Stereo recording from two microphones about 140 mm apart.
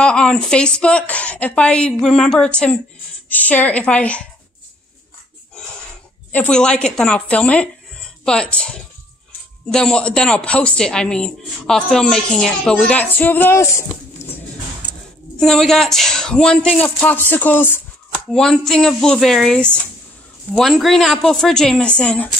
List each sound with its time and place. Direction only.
0.0 s speech: 5° left (ahead or behind)
6.3 s speech: 10° left (ahead or behind)
14.2 s music: 20° left (ahead or behind)
15.3 s speech: 5° left (ahead or behind)